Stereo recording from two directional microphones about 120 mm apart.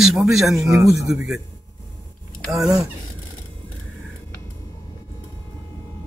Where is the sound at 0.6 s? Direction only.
30° right (ahead or behind).